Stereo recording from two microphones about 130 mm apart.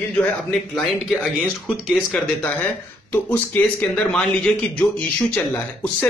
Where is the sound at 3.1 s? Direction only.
15° left (ahead or behind).